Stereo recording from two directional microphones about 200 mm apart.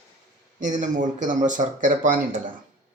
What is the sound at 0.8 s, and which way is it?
Speech, 40° right (ahead or behind).